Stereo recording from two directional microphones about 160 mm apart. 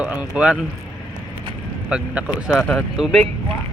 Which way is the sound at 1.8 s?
10° right (ahead or behind).